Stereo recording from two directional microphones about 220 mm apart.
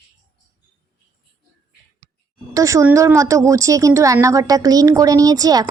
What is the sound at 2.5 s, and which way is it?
Speech, 15° right (ahead or behind).